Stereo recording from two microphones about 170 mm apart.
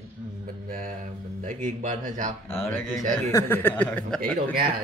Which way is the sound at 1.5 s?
50° right (ahead or behind).